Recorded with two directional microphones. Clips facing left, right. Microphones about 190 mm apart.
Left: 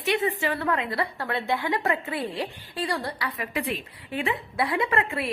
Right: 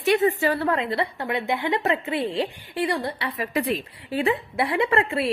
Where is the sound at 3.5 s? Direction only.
40° right (ahead or behind).